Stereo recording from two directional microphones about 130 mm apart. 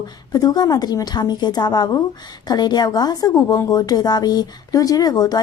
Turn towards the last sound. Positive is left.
turn(degrees=30)  # may be behind; listen again after turning